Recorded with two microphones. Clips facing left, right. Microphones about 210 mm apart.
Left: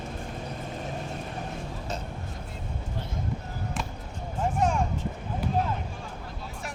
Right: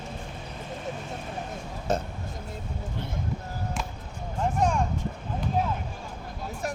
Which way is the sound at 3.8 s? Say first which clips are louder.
Even; centre (ahead or behind).